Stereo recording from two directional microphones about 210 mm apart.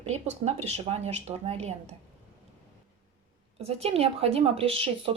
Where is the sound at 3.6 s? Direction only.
30° right (ahead or behind).